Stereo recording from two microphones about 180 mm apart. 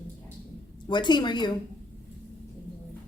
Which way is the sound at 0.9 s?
25° left (ahead or behind).